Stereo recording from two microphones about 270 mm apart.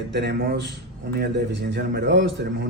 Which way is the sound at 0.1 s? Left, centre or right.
Right.